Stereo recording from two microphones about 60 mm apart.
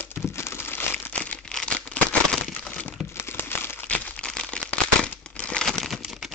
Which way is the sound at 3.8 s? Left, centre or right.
Left.